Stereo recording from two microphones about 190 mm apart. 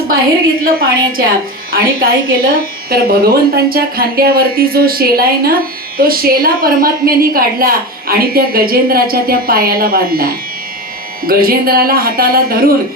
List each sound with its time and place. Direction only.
0.6 s a woman's voice: 50° right (ahead or behind)